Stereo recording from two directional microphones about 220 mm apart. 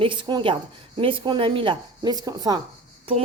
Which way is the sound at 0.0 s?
20° right (ahead or behind).